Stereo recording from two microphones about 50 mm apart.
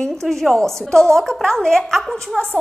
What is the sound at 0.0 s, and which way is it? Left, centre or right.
A woman's voice, centre.